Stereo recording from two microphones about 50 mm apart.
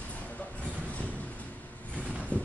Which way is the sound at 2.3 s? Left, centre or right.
Left.